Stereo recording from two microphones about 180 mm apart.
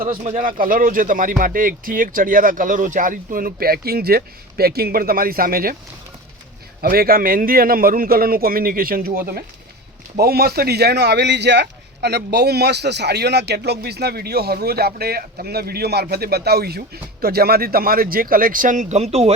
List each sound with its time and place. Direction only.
0.0 s speech: 50° right (ahead or behind)
6.8 s speech: 55° right (ahead or behind); by 19.3 s 35° right (ahead or behind)